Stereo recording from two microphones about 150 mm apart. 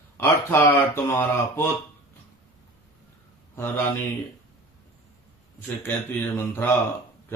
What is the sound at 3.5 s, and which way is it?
Speech, 15° left (ahead or behind).